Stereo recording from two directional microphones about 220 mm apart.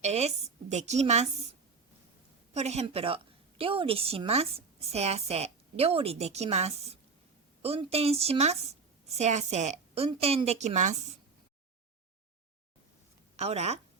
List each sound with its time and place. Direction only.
0.0 s a woman's voice: 30° right (ahead or behind)
2.5 s a woman's voice: 30° right (ahead or behind)
13.3 s a woman's voice: 30° right (ahead or behind)